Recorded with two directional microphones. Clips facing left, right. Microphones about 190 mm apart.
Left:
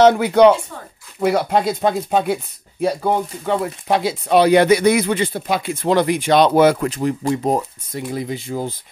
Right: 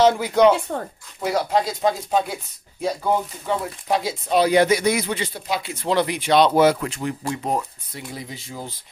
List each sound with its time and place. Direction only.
0.0 s speech: 65° left (ahead or behind)
0.7 s speech: 50° right (ahead or behind)
1.2 s speech: 60° left (ahead or behind)
6.9 s speech: 40° left (ahead or behind)
8.1 s speech: 55° left (ahead or behind)